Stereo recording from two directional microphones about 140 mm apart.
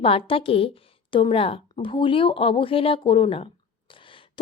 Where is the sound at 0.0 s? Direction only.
40° left (ahead or behind).